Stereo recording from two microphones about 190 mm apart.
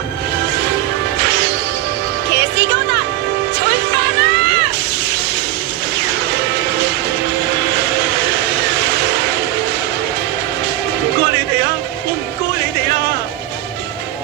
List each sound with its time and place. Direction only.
1.2 s whip: 65° right (ahead or behind)
2.3 s music: 65° right (ahead or behind)
7.5 s vehicle: 60° right (ahead or behind)
11.2 s music: 60° right (ahead or behind)